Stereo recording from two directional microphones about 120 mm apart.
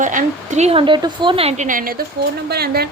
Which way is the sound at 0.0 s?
90° right.